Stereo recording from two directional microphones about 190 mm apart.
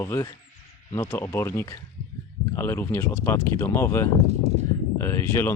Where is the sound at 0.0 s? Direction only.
15° left (ahead or behind).